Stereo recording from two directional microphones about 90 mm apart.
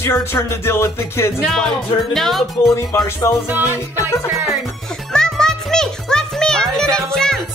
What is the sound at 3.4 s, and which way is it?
Music, 20° right (ahead or behind).